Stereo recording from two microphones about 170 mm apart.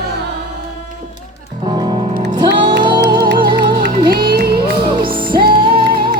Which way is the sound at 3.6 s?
75° right (ahead or behind).